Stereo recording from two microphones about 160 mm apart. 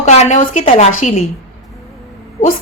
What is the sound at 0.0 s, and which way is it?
Speech, 45° left (ahead or behind).